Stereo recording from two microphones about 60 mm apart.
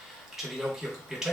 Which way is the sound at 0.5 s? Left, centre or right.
Centre.